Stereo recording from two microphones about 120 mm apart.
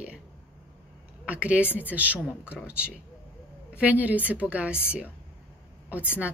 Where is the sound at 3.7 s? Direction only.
10° right (ahead or behind).